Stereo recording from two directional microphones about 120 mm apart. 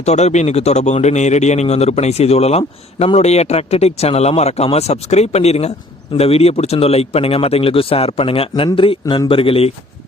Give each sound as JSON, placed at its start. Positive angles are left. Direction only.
{"t": 0.0, "sound": "speech", "side_deg": 65}